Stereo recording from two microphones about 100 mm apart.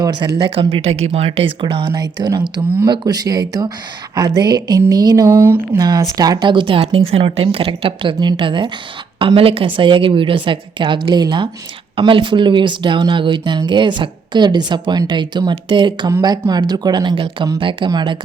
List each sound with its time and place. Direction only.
0.0 s speech: 50° right (ahead or behind)
0.7 s speech: 90° right
2.0 s speech: 45° right (ahead or behind)
5.3 s speech: 20° right (ahead or behind)
5.7 s speech: 40° right (ahead or behind)
6.4 s a woman's voice: 55° right (ahead or behind)